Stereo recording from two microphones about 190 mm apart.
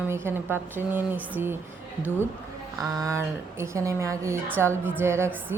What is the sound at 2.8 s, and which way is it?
A woman's voice, 15° right (ahead or behind).